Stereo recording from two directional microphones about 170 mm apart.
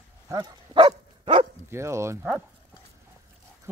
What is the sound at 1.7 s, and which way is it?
Speech, 15° right (ahead or behind).